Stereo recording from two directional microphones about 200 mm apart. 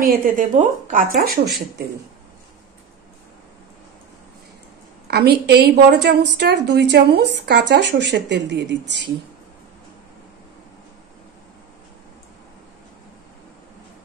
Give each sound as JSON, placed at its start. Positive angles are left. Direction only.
{"t": 0.0, "sound": "a woman's voice", "side_deg": -45}
{"t": 5.0, "sound": "a woman's voice", "side_deg": -55}